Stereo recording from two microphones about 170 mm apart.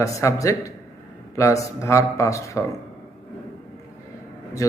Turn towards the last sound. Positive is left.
turn(degrees=20)  # may be behind; listen again after turning